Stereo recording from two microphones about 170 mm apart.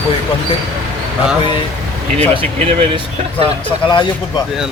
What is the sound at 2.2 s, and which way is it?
Speech, 35° right (ahead or behind).